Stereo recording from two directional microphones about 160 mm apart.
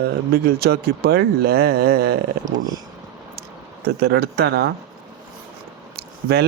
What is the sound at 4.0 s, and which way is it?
Speech, 85° right.